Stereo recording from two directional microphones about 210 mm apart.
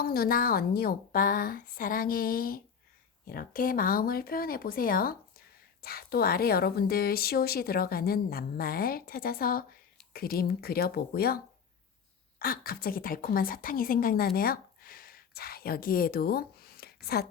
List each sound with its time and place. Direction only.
0.0 s speech: 45° left (ahead or behind)
12.4 s a woman's voice: 45° left (ahead or behind)